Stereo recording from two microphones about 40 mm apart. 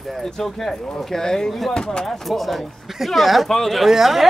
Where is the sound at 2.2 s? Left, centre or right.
Centre.